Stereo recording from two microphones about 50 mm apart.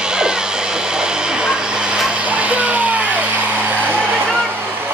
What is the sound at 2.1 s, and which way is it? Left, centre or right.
Music, right.